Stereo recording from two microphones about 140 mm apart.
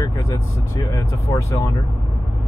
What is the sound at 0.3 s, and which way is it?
Speech, 25° left (ahead or behind).